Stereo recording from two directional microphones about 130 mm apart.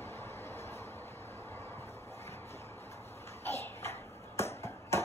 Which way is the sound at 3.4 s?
20° left (ahead or behind).